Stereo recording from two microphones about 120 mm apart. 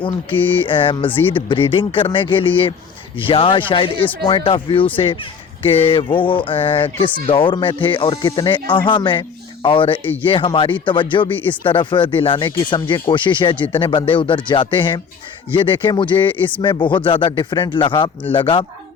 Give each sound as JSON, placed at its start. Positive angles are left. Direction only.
{"t": 0.3, "sound": "speech", "side_deg": 15}
{"t": 0.7, "sound": "speech", "side_deg": 45}